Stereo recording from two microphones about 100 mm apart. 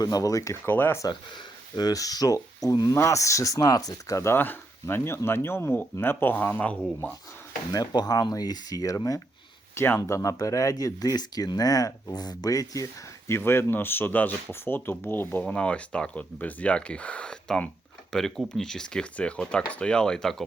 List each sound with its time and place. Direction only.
0.0 s speech: 35° left (ahead or behind)
0.6 s speech: 20° left (ahead or behind)
0.9 s speech: 40° left (ahead or behind); by 7.1 s 15° left (ahead or behind)
7.7 s speech: 40° left (ahead or behind)
9.7 s speech: 20° left (ahead or behind)
10.0 s speech: 30° left (ahead or behind); by 20.3 s 5° left (ahead or behind)